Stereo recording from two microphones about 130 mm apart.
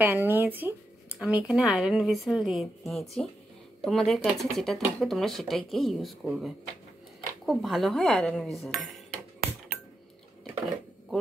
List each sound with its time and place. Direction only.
0.0 s speech: 15° right (ahead or behind); by 8.9 s centre (ahead or behind)